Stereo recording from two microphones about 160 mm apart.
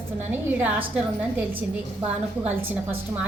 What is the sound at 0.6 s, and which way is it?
Speech, 10° right (ahead or behind).